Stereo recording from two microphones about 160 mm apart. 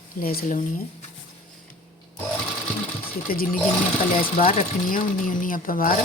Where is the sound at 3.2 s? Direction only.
65° left (ahead or behind).